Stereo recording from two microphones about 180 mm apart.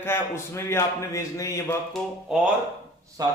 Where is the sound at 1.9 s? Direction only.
5° right (ahead or behind).